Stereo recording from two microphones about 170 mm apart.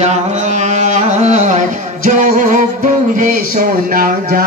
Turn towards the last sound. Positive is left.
turn(degrees=-55)  # may be behind; listen again after turning